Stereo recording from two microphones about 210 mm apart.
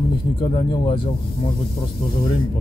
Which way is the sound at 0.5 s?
25° left (ahead or behind).